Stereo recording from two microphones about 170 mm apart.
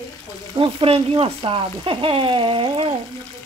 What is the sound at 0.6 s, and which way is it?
Frying, 35° right (ahead or behind).